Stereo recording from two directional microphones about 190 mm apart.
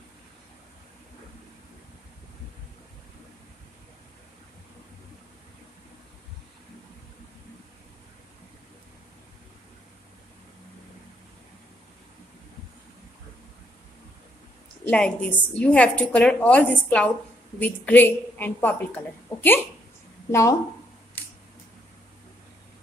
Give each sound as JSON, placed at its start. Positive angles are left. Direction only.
{"t": 14.9, "sound": "a woman's voice", "side_deg": 5}
{"t": 20.2, "sound": "speech", "side_deg": 15}